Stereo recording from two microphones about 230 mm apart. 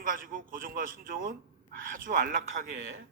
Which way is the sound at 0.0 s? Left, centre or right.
Right.